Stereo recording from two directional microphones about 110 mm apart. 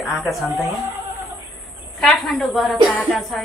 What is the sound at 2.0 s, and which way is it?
A man's voice, centre (ahead or behind).